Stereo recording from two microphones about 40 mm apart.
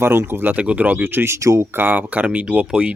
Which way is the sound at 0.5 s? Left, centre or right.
Right.